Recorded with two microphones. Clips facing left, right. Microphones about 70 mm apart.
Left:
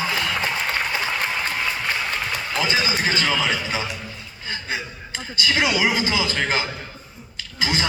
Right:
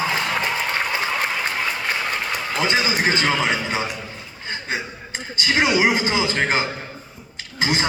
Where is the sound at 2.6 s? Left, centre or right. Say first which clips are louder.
Right 3 dB; right.